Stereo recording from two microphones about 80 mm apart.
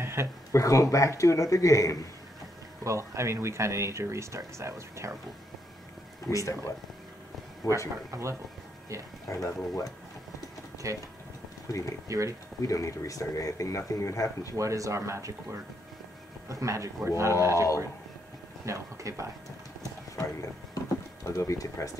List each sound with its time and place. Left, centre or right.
0.0 s a sound: right
0.5 s speech: left
2.8 s speech: right
6.3 s speech: left
8.1 s speech: right
9.3 s speech: left
10.8 s speech: right
12.1 s speech: right
12.6 s speech: left
14.6 s speech: right
18.7 s speech: right
20.2 s speech: left